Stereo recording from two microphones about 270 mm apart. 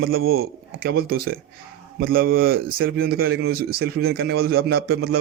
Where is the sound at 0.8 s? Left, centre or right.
Right.